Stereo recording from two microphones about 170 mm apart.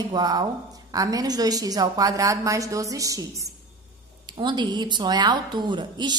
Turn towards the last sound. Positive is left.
turn(degrees=-25)  # may be behind; listen again after turning